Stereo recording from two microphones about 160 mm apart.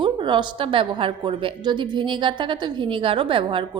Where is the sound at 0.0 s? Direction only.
30° right (ahead or behind).